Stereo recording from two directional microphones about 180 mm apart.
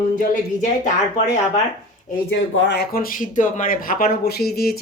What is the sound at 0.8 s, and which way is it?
Speech, 40° left (ahead or behind).